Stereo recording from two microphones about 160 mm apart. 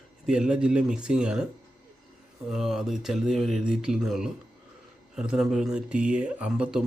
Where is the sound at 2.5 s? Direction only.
Centre (ahead or behind).